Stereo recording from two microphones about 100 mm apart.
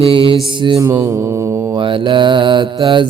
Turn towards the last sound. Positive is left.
turn(degrees=-55)  # may be behind; listen again after turning